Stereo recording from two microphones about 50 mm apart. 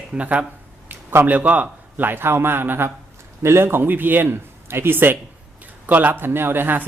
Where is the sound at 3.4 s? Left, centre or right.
Right.